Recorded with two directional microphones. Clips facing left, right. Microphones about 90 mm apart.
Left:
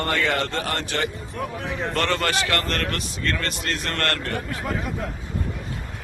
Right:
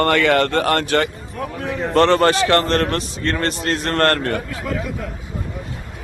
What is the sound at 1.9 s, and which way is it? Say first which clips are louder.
A man's voice: right 11 dB; 35° right (ahead or behind).